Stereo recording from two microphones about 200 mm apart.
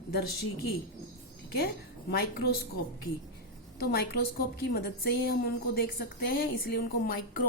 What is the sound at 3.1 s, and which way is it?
Speech, 75° left (ahead or behind).